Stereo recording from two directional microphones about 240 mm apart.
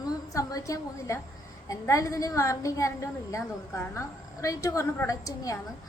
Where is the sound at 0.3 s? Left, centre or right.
Centre.